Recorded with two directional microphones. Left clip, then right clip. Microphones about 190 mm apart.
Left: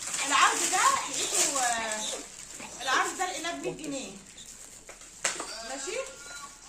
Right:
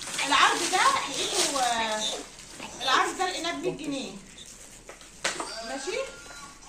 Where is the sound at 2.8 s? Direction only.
5° left (ahead or behind).